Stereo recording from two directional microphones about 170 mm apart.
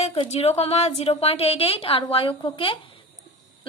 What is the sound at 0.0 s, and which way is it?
A woman's voice, 35° left (ahead or behind).